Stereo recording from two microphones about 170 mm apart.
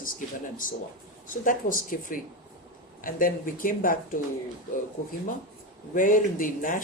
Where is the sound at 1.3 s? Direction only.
50° left (ahead or behind).